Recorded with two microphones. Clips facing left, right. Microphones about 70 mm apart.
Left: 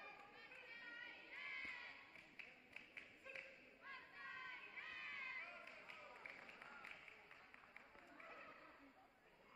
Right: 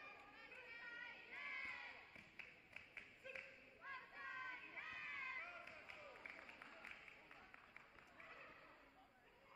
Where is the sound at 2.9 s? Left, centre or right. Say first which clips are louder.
Right 2 dB; centre.